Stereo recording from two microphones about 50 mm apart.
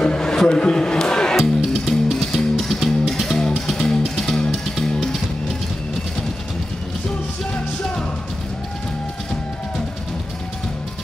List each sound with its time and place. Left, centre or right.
0.0 s a sound: centre
0.5 s speech: centre
1.3 s music: centre
4.0 s music: centre
4.8 s music: centre